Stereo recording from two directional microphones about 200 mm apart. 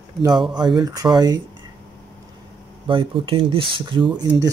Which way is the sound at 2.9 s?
25° right (ahead or behind).